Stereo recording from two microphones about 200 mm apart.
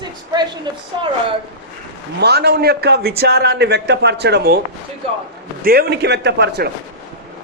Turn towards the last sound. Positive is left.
turn(degrees=-55)  # may be behind; listen again after turning